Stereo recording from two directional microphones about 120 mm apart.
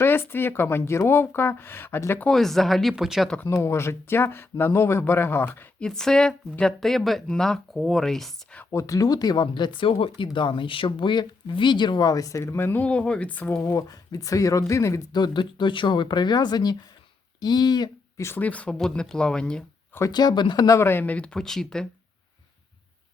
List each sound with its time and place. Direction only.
0.0 s a woman's voice: 20° left (ahead or behind)
2.2 s speech: 5° left (ahead or behind)
3.4 s a woman's voice: 20° left (ahead or behind)
5.8 s speech: 5° left (ahead or behind)
8.7 s speech: 25° left (ahead or behind)
12.4 s speech: 15° left (ahead or behind)
13.6 s a woman's voice: 30° left (ahead or behind)
15.1 s speech: 40° left (ahead or behind)
18.2 s speech: 15° left (ahead or behind)
20.1 s a woman's voice: 35° left (ahead or behind); by 21.8 s 5° left (ahead or behind)